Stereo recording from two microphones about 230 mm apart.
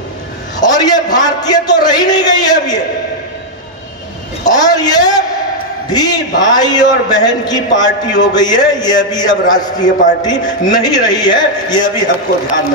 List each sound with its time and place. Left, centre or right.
0.6 s a man's voice: centre
4.5 s a man's voice: centre